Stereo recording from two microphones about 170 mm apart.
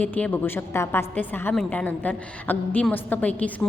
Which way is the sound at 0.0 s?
10° left (ahead or behind).